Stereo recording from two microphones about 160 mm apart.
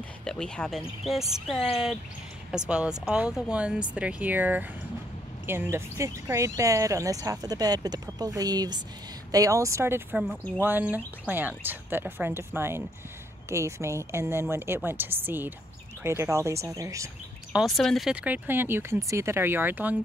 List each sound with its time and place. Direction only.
0.2 s speech: 5° left (ahead or behind); by 17.1 s 20° right (ahead or behind)
17.5 s speech: centre (ahead or behind)